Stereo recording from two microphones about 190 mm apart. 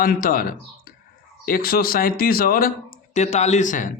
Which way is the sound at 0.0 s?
50° left (ahead or behind).